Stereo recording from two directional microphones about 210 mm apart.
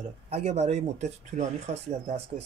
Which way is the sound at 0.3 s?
30° right (ahead or behind).